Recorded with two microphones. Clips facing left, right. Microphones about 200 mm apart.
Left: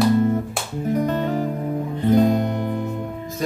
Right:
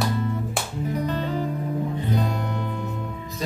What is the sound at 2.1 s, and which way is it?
Music, 50° left (ahead or behind).